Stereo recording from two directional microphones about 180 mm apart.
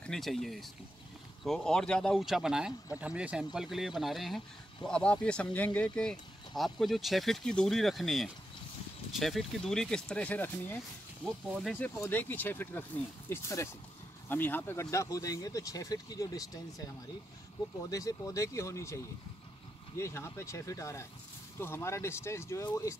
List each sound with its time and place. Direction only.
0.0 s speech: centre (ahead or behind)
11.2 s speech: centre (ahead or behind)
11.8 s speech: 10° left (ahead or behind)
20.0 s speech: 15° left (ahead or behind)